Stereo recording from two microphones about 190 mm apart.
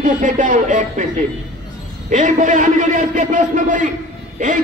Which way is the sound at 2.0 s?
40° right (ahead or behind).